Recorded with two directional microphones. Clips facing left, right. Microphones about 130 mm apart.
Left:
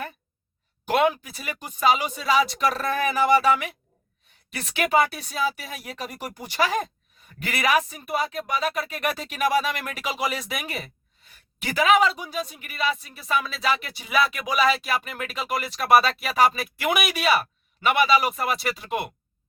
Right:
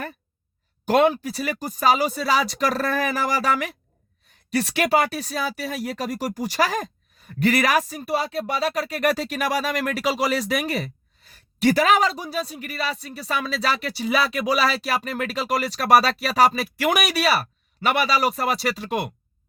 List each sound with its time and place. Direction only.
0.9 s speech: 35° right (ahead or behind)